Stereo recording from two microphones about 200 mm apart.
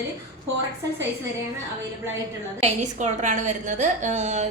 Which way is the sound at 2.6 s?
35° right (ahead or behind).